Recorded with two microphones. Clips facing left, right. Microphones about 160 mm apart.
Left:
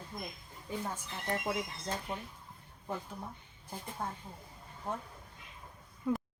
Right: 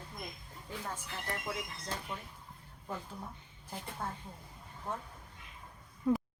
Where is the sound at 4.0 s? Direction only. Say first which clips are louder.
Left 1 dB; 15° left (ahead or behind).